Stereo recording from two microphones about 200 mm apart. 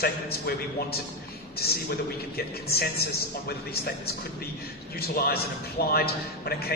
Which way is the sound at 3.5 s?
50° left (ahead or behind).